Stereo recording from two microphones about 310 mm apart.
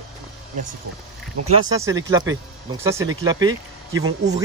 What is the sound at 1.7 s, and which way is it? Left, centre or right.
Speech, centre.